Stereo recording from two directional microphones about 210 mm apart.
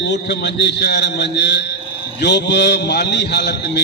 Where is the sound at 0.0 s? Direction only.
55° left (ahead or behind).